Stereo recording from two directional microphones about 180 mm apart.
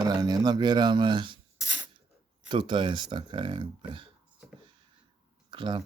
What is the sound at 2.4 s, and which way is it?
Speech, 25° right (ahead or behind).